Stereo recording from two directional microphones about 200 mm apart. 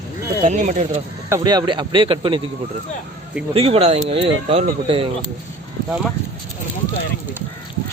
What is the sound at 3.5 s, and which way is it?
Speech, 30° right (ahead or behind).